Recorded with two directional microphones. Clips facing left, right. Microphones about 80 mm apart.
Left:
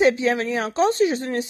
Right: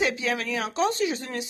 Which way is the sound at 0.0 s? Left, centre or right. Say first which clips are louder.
Left 8 dB; left.